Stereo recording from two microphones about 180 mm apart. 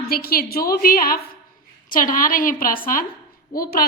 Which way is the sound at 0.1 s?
55° left (ahead or behind).